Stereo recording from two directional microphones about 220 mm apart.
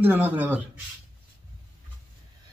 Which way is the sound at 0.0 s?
10° right (ahead or behind).